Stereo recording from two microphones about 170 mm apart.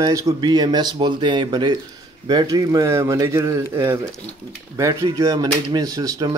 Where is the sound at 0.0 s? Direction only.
25° right (ahead or behind).